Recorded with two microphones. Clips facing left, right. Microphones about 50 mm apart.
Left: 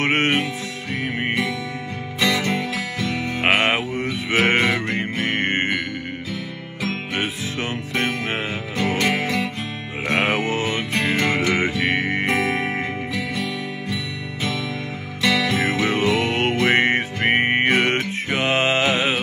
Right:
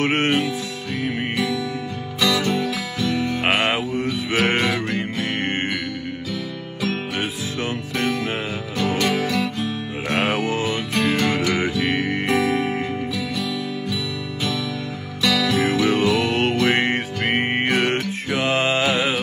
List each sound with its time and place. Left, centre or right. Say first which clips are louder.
0.0 s music: even; left
6.8 s music: even; left
15.2 s music: even; left